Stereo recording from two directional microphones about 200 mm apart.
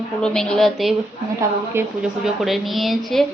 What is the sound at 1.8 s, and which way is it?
Speech, 10° right (ahead or behind).